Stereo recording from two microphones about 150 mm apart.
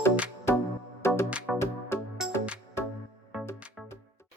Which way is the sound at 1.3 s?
10° right (ahead or behind).